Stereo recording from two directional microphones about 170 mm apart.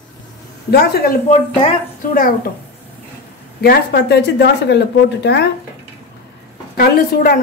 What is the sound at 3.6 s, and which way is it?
Speech, 70° left (ahead or behind).